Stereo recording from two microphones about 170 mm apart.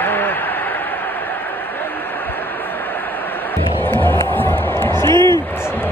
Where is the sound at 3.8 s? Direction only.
10° left (ahead or behind).